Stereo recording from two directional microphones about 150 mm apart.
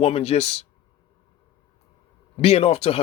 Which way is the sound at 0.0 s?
40° left (ahead or behind).